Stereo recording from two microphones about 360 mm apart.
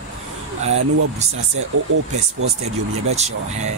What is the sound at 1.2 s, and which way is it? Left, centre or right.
Speech, centre.